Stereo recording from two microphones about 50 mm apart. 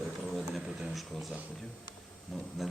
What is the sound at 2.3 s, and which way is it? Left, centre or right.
Speech, centre.